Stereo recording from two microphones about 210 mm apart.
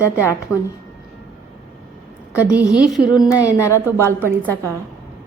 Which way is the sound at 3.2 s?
15° left (ahead or behind).